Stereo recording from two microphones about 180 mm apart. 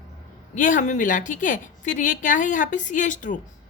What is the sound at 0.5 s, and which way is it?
A woman's voice, 45° left (ahead or behind).